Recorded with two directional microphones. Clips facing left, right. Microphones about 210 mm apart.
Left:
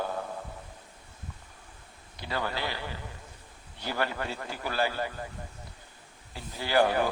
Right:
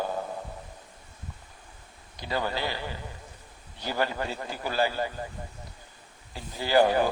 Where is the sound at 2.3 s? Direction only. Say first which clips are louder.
Right 3 dB; 15° right (ahead or behind).